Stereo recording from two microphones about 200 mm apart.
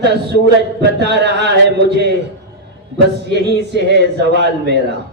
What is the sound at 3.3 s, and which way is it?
A man's voice, 60° right (ahead or behind).